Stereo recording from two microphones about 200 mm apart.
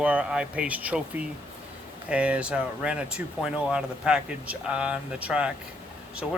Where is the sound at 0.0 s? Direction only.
5° right (ahead or behind).